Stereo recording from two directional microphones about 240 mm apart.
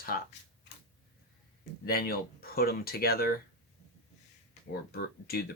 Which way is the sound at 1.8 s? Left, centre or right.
Left.